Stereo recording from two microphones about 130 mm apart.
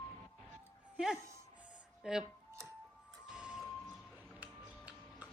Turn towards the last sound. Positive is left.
turn(degrees=-10)  # may be behind; listen again after turning